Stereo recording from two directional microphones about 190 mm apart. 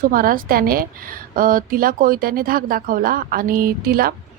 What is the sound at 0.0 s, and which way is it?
A woman's voice, 50° right (ahead or behind).